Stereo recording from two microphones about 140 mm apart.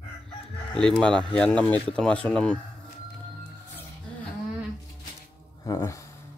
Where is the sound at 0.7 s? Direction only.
5° left (ahead or behind).